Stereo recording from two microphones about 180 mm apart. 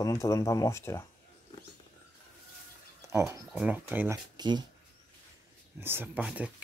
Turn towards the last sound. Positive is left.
turn(degrees=-5)  # may be behind; listen again after turning